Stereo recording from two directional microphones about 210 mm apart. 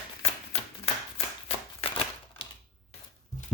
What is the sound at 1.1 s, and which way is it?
Shuffling cards, 25° left (ahead or behind).